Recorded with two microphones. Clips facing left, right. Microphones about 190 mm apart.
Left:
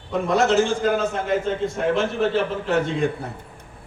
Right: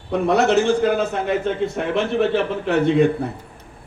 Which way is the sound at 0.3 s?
65° right (ahead or behind).